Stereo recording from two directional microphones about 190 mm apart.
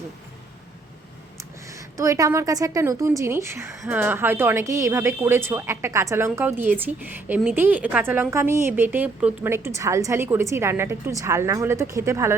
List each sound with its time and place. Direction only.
1.6 s a woman's voice: 15° right (ahead or behind)